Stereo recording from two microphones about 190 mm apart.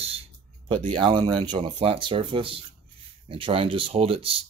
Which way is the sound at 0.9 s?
25° right (ahead or behind).